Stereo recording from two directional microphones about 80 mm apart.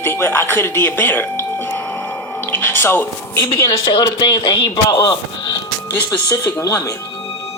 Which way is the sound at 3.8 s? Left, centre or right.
Left.